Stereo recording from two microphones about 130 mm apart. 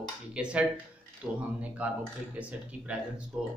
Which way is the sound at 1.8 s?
10° right (ahead or behind).